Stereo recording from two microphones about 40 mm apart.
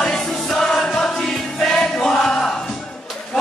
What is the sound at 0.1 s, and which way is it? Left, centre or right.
Music, centre.